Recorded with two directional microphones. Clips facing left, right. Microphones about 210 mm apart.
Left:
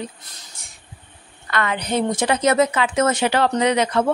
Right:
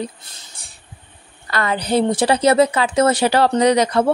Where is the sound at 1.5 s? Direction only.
35° right (ahead or behind).